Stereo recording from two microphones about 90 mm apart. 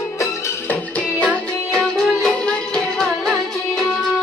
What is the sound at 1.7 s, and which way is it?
Music, 5° left (ahead or behind).